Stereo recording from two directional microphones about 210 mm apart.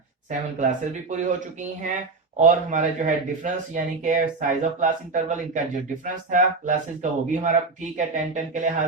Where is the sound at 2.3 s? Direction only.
35° right (ahead or behind).